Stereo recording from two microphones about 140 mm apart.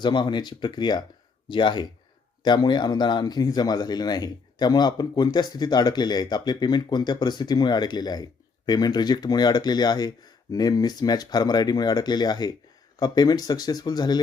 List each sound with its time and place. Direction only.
0.0 s speech: 35° left (ahead or behind)